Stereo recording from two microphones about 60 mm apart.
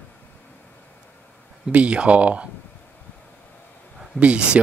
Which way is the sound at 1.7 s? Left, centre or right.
Right.